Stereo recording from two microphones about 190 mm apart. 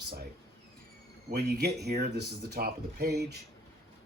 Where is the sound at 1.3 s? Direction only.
55° right (ahead or behind).